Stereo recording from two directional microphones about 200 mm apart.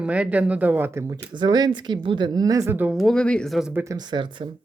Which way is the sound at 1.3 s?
20° right (ahead or behind).